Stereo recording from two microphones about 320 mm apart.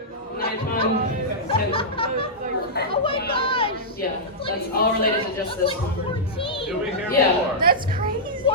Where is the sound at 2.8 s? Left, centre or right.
Left.